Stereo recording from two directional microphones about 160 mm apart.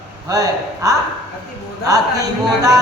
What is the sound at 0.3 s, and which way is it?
Music, 20° right (ahead or behind).